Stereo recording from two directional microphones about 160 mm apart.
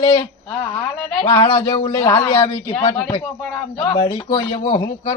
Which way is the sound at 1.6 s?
20° left (ahead or behind).